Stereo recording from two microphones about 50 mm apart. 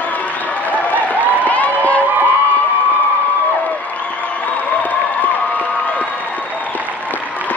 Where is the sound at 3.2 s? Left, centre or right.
Left.